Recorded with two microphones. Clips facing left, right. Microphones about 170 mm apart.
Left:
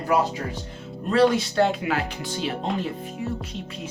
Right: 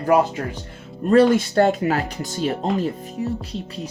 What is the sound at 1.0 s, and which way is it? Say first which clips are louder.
Speech: right 5 dB; 50° right (ahead or behind).